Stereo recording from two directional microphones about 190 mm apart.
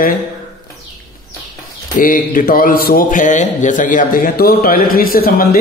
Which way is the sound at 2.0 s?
45° left (ahead or behind).